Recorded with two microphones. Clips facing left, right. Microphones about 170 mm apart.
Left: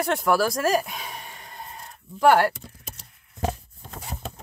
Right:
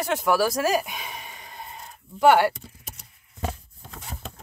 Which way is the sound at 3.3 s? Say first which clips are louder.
Left 4 dB; 40° left (ahead or behind).